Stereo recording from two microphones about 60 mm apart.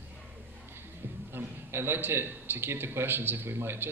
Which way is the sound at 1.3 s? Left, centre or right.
Right.